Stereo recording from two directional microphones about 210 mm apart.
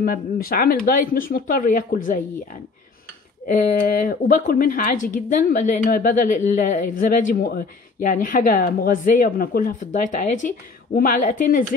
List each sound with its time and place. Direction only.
0.0 s speech: 45° left (ahead or behind)
3.4 s a woman's voice: 40° left (ahead or behind)
11.0 s a woman's voice: 40° left (ahead or behind)